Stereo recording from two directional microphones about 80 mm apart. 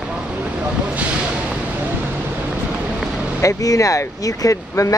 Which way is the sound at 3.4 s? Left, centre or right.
Left.